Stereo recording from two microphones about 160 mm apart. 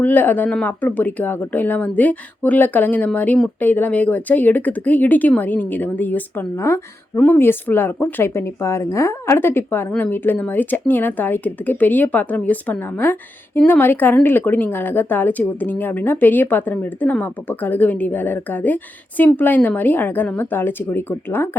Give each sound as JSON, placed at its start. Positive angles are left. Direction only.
{"t": 0.0, "sound": "a woman's voice", "side_deg": 10}